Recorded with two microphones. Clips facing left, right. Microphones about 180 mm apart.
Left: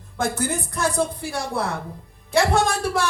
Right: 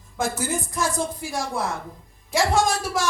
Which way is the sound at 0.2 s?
60° left (ahead or behind).